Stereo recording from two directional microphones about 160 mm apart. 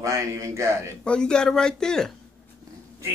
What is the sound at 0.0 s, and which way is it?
Speech, 20° right (ahead or behind).